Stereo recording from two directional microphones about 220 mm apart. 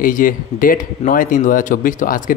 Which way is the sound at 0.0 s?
40° left (ahead or behind).